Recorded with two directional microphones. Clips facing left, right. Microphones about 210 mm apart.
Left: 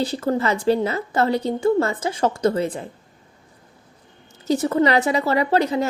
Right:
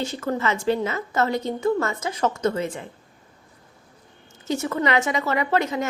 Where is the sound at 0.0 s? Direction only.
35° left (ahead or behind).